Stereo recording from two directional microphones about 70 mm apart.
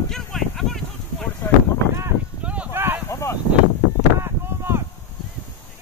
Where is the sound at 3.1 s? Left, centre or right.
Left.